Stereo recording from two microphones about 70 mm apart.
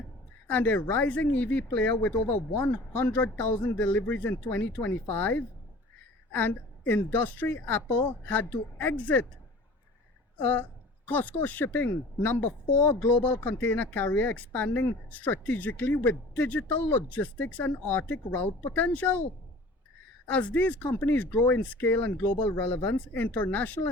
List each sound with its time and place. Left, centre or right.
0.4 s a woman's voice: left
10.4 s a woman's voice: left
20.2 s a woman's voice: left